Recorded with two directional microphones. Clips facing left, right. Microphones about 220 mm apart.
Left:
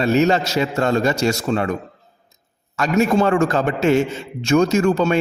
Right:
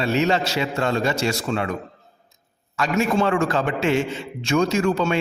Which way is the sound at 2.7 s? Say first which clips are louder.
Left 4 dB; 40° left (ahead or behind).